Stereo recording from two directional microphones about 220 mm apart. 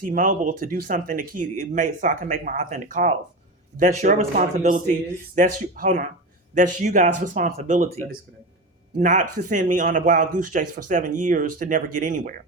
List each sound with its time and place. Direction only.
0.1 s speech: 35° right (ahead or behind)
9.0 s speech: 35° right (ahead or behind)